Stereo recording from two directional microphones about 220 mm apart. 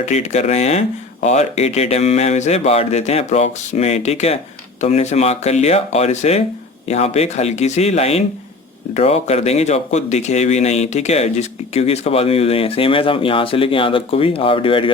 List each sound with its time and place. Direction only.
0.0 s speech: 30° left (ahead or behind)